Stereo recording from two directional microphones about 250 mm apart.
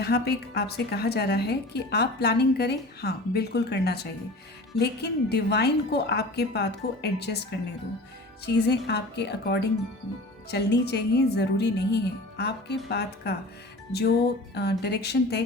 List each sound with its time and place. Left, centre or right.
0.0 s speech: left
8.5 s speech: left
14.5 s speech: left